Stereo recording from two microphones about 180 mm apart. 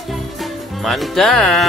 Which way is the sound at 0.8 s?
Centre (ahead or behind).